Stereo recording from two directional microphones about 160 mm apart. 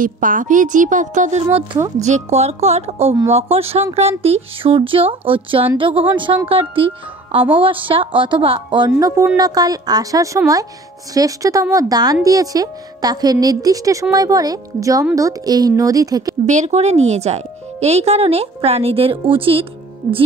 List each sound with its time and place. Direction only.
0.0 s a woman's voice: 55° right (ahead or behind); by 16.3 s 25° right (ahead or behind)
16.4 s speech: 45° right (ahead or behind)